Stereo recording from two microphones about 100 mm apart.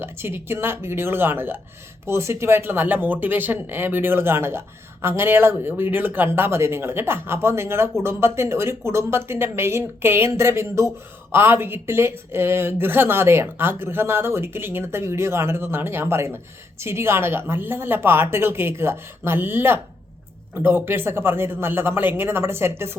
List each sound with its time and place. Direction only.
0.0 s speech: 20° right (ahead or behind)